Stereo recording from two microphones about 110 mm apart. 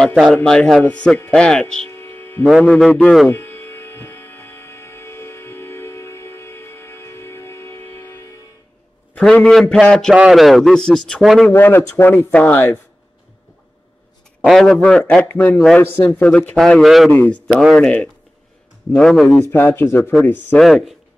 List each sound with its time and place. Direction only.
0.1 s speech: 5° left (ahead or behind)
1.9 s hum: 20° left (ahead or behind)
2.9 s speech: 15° left (ahead or behind)
3.3 s hum: 25° left (ahead or behind)
9.1 s a man's voice: 10° left (ahead or behind)
11.5 s speech: 20° left (ahead or behind)
14.4 s a man's voice: centre (ahead or behind)
16.5 s a man's voice: 5° left (ahead or behind)
17.1 s a man's voice: 15° left (ahead or behind)
19.2 s speech: 20° left (ahead or behind)
20.5 s a man's voice: centre (ahead or behind)